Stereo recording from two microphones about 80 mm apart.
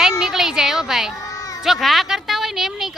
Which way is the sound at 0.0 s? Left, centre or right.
Centre.